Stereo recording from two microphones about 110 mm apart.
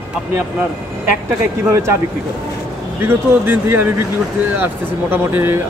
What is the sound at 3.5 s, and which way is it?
A man's voice, 20° right (ahead or behind).